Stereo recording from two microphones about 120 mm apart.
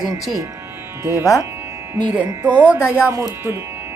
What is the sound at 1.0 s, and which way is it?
Speech, 20° right (ahead or behind).